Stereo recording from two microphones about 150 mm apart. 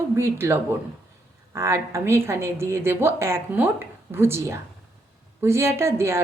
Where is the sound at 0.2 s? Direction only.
15° right (ahead or behind).